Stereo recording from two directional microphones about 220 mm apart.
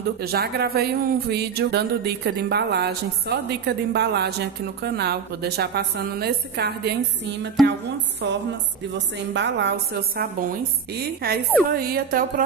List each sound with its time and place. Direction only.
0.2 s speech: 45° right (ahead or behind)
7.6 s a woman's voice: centre (ahead or behind)
8.2 s speech: 55° right (ahead or behind)
11.7 s music: 40° right (ahead or behind)